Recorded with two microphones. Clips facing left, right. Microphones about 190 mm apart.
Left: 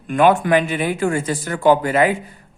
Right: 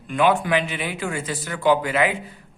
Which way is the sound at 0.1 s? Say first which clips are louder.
Left 5 dB; 50° left (ahead or behind).